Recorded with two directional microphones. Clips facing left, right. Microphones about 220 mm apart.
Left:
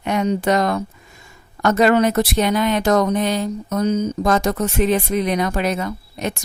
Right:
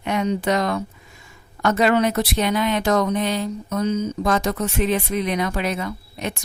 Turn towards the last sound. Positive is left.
turn(degrees=45)  # may be behind; listen again after turning